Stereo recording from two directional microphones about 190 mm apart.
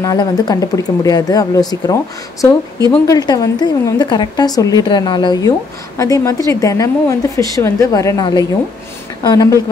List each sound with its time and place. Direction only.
0.0 s a woman's voice: 20° left (ahead or behind)
3.1 s a woman's voice: 20° left (ahead or behind)